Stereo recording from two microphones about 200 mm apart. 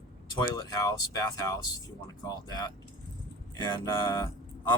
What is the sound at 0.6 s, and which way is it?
Speech, 20° left (ahead or behind).